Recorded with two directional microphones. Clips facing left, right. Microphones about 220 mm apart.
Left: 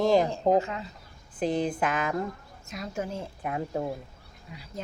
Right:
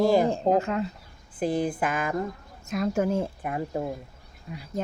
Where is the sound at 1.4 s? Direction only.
5° right (ahead or behind).